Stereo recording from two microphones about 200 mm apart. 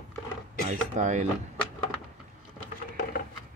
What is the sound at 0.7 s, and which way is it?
Speech, 35° right (ahead or behind).